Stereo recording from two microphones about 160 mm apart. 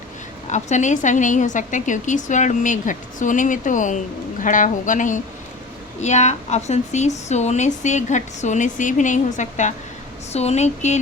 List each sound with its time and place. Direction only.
0.5 s a woman's voice: 50° left (ahead or behind)